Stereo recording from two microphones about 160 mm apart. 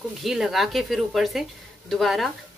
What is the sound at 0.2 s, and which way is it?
A man's voice, centre (ahead or behind).